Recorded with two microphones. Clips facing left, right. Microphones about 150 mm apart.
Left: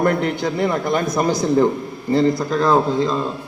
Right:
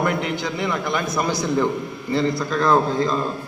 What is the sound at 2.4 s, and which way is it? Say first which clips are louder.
Speech: left 2 dB; 20° left (ahead or behind).